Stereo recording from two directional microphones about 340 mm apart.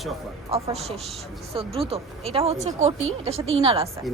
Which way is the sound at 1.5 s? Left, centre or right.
Centre.